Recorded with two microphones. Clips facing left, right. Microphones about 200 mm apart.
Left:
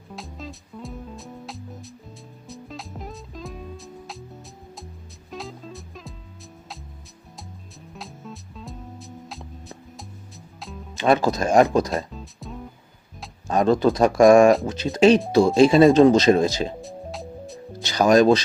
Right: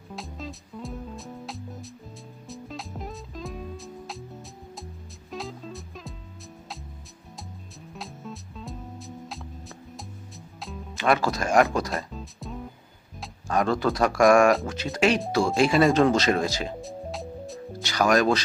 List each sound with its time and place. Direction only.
0.2 s music: centre (ahead or behind)
5.3 s music: centre (ahead or behind)
7.9 s music: centre (ahead or behind)
10.9 s speech: 25° left (ahead or behind)
12.1 s music: centre (ahead or behind)
13.5 s speech: 20° left (ahead or behind)
16.8 s music: centre (ahead or behind)
17.8 s speech: 20° left (ahead or behind)